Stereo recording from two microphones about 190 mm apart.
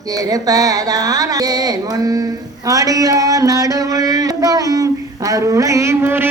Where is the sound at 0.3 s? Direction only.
20° right (ahead or behind).